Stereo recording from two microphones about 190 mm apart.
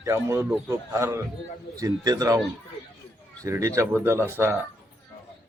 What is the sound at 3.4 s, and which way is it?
A child's voice, 15° right (ahead or behind).